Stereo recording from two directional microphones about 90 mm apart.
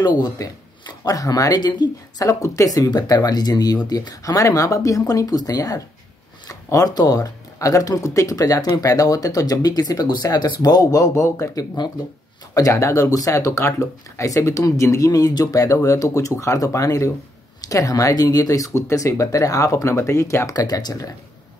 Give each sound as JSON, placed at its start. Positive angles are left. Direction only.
{"t": 0.0, "sound": "speech", "side_deg": 50}